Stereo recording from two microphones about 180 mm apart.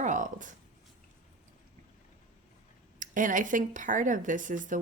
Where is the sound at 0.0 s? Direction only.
45° right (ahead or behind).